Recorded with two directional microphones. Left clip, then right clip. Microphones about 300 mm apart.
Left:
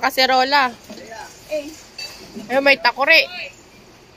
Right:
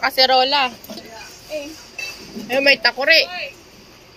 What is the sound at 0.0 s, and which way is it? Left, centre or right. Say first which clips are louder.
Speech: right 1 dB; centre.